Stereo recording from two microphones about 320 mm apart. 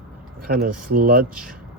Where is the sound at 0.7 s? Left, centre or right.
Right.